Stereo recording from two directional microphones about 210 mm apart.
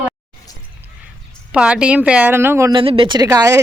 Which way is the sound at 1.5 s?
5° right (ahead or behind).